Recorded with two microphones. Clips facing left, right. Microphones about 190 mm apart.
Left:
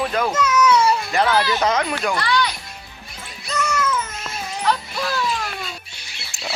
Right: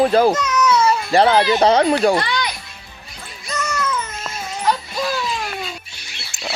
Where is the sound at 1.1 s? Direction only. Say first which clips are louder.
Right 5 dB; 30° right (ahead or behind).